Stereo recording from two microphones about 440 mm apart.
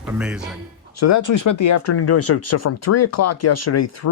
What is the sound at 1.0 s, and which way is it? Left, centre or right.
Speech, left.